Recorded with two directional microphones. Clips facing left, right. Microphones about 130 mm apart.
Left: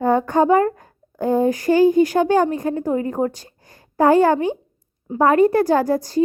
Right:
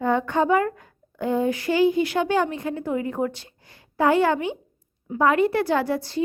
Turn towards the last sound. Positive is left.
turn(degrees=40)  # may be behind; listen again after turning